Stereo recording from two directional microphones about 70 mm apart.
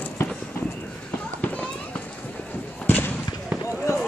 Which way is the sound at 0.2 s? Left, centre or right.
Left.